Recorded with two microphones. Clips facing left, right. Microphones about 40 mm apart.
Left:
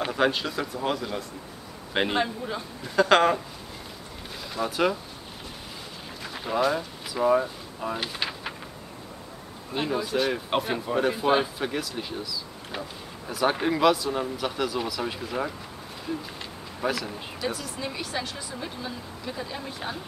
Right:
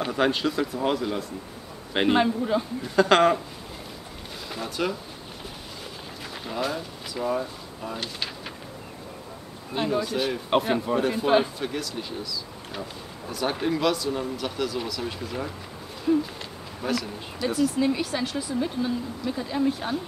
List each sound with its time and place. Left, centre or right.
0.0 s speech: centre
4.6 s speech: centre
6.6 s speech: centre
9.8 s speech: centre
16.1 s speech: centre
16.8 s speech: centre